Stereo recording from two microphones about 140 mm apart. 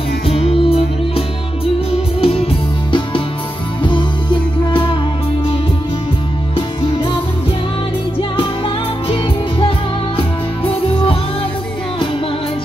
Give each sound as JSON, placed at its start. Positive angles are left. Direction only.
{"t": 0.3, "sound": "music", "side_deg": 45}
{"t": 3.8, "sound": "music", "side_deg": 35}
{"t": 6.5, "sound": "music", "side_deg": 40}
{"t": 10.1, "sound": "music", "side_deg": 40}